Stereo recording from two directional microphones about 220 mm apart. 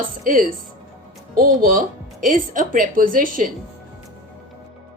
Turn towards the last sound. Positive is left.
turn(degrees=-40)  # may be behind; listen again after turning